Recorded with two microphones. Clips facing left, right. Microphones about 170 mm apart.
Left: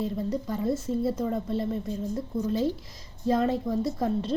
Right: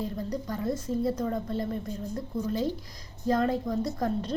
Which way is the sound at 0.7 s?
25° left (ahead or behind).